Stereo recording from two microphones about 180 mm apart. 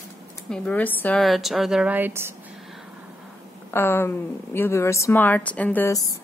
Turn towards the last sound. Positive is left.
turn(degrees=15)  # may be behind; listen again after turning